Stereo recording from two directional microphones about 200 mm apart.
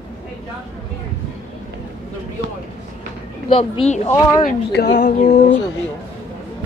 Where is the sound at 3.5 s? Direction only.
30° left (ahead or behind).